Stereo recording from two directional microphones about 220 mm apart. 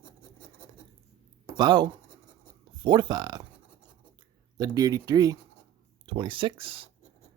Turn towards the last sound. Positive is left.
turn(degrees=-25)  # may be behind; listen again after turning